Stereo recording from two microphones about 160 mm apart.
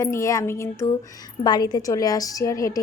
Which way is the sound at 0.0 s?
20° left (ahead or behind).